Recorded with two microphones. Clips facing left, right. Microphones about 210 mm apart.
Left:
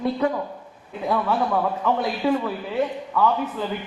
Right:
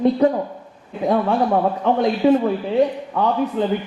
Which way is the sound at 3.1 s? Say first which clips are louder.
Right 3 dB; 35° right (ahead or behind).